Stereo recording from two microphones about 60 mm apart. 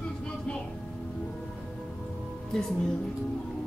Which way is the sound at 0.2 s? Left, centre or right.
Centre.